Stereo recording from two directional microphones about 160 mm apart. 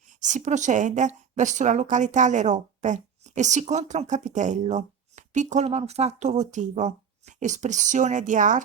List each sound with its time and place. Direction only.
0.2 s speech: 50° right (ahead or behind)